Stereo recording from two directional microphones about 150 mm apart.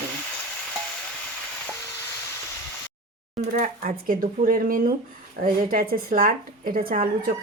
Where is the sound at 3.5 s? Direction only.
65° right (ahead or behind).